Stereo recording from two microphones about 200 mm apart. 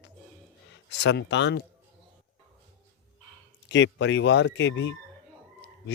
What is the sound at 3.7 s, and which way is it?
Speech, 65° left (ahead or behind).